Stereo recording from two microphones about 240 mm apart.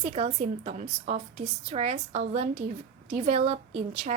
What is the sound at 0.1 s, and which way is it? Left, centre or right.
A woman's voice, right.